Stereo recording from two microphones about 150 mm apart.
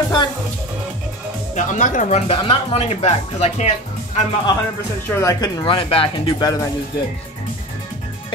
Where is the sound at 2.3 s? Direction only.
35° left (ahead or behind).